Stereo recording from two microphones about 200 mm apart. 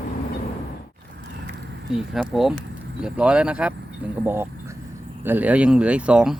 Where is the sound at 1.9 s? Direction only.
Centre (ahead or behind).